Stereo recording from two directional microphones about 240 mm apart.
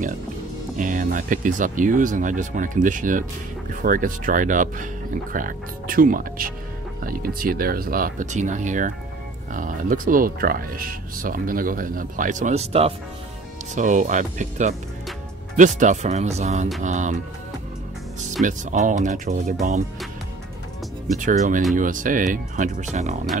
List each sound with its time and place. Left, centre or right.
0.7 s speech: right
18.4 s speech: right
21.2 s speech: right